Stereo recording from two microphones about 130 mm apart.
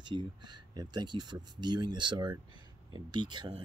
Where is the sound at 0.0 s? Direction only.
35° right (ahead or behind).